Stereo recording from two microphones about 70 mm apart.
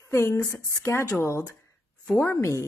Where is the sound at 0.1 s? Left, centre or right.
Left.